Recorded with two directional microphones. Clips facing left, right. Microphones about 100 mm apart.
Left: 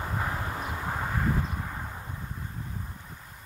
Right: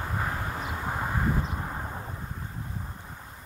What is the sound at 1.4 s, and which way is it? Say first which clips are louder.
Vehicle: right 2 dB; 25° right (ahead or behind).